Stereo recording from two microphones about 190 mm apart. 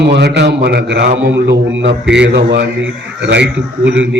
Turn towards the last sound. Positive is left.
turn(degrees=-70)  # may be behind; listen again after turning